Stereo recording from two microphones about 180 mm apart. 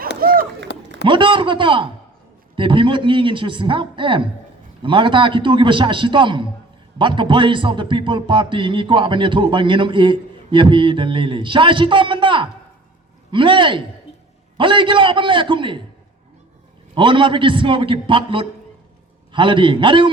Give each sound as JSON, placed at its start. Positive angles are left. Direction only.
{"t": 0.2, "sound": "run", "side_deg": -55}
{"t": 1.0, "sound": "a man's voice", "side_deg": -25}
{"t": 16.9, "sound": "speech", "side_deg": -25}